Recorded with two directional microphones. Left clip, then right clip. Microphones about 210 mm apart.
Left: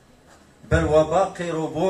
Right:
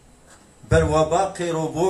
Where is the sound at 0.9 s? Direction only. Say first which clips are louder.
Left 1 dB; 55° right (ahead or behind).